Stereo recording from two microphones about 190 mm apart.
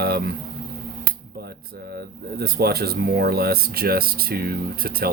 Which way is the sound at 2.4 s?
55° right (ahead or behind).